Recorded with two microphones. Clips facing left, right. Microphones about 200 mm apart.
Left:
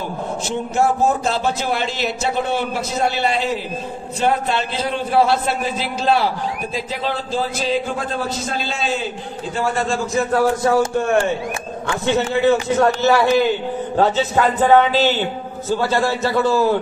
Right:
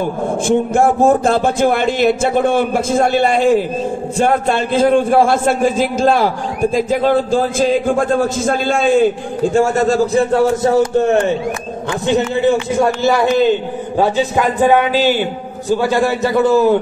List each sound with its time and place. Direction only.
0.5 s a man's voice: 50° right (ahead or behind)
10.3 s a man's voice: 25° right (ahead or behind)